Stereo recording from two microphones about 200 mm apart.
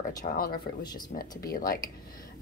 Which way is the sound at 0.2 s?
45° left (ahead or behind).